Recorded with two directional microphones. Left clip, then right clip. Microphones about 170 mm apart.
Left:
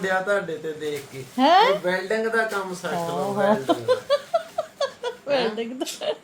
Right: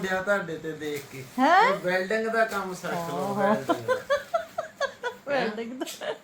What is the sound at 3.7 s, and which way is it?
Speech, 15° left (ahead or behind).